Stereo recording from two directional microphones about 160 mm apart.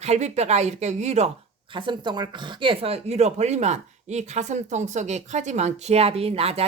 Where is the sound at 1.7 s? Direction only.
30° right (ahead or behind).